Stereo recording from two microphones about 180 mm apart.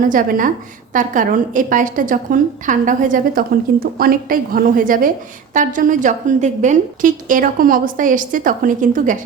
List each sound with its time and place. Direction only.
0.1 s a woman's voice: 50° right (ahead or behind)